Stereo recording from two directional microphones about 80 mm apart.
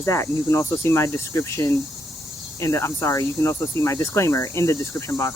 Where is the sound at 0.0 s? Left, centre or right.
Left.